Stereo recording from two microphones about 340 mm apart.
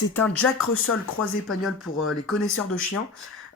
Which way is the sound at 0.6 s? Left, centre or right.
Left.